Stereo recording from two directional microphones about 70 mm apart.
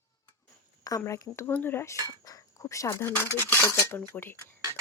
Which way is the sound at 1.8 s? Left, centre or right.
Left.